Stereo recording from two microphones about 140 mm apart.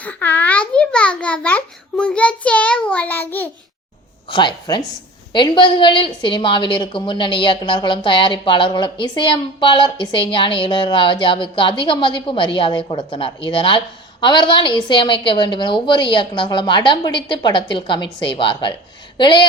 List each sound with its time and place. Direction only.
0.0 s a child's voice: 10° left (ahead or behind)
4.3 s a woman's voice: 35° left (ahead or behind)